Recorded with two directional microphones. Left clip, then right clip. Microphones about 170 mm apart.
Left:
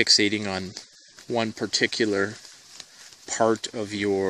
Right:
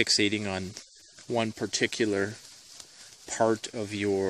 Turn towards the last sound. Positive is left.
turn(degrees=10)  # may be behind; listen again after turning